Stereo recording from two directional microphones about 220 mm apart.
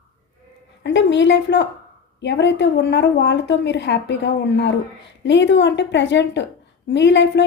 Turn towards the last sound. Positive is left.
turn(degrees=50)  # may be behind; listen again after turning